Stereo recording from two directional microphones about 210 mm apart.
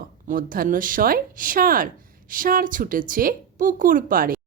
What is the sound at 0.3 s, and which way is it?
A woman's voice, 40° right (ahead or behind).